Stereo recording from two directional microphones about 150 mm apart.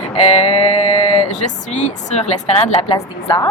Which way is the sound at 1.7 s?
50° left (ahead or behind).